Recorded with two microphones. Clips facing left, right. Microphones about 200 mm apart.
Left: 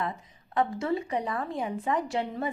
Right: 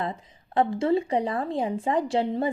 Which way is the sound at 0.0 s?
30° right (ahead or behind).